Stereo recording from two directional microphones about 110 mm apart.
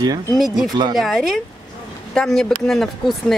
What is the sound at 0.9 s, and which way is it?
Speech, centre (ahead or behind).